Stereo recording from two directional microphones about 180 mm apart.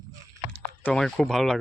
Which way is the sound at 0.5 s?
5° left (ahead or behind).